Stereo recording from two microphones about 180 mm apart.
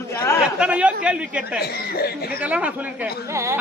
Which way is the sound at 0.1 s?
15° left (ahead or behind).